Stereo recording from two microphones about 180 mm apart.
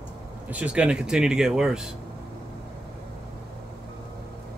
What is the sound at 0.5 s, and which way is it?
Speech, 5° right (ahead or behind).